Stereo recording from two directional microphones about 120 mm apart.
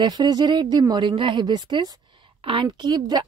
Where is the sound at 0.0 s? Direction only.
35° right (ahead or behind).